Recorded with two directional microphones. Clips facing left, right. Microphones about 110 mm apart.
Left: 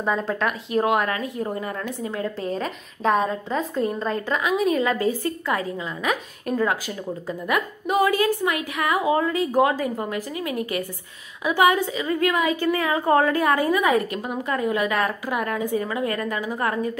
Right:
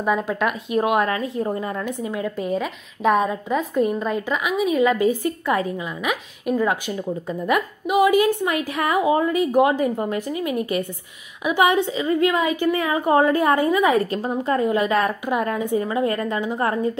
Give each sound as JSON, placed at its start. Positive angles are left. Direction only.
{"t": 0.0, "sound": "a woman's voice", "side_deg": -10}
{"t": 7.2, "sound": "a woman's voice", "side_deg": -25}
{"t": 7.8, "sound": "a woman's voice", "side_deg": -10}
{"t": 8.7, "sound": "a woman's voice", "side_deg": -25}